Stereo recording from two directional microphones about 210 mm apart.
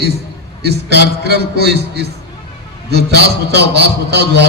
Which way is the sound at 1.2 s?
50° right (ahead or behind).